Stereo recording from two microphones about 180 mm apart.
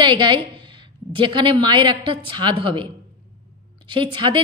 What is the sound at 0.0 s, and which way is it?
A woman's voice, 25° right (ahead or behind).